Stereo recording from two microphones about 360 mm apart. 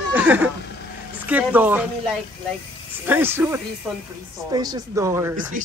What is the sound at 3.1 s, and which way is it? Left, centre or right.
Speech, centre.